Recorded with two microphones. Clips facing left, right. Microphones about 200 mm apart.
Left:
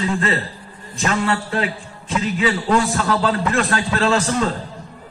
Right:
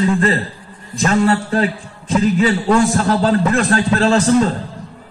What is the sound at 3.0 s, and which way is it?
A man's voice, 40° right (ahead or behind).